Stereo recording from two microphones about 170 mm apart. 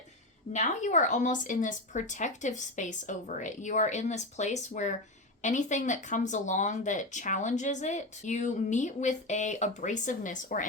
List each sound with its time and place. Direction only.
0.5 s speech: 45° left (ahead or behind)